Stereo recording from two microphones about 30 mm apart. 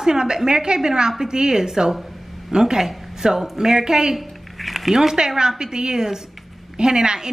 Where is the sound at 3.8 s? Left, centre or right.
Right.